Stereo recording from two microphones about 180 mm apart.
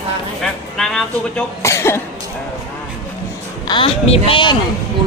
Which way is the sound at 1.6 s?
15° left (ahead or behind).